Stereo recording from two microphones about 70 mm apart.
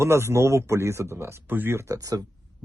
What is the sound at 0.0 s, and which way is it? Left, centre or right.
Speech, right.